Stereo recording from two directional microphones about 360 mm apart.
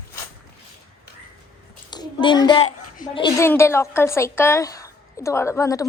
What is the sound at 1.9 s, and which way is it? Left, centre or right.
Speech, centre.